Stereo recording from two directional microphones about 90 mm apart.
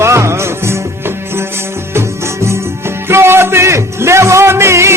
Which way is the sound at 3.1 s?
25° right (ahead or behind).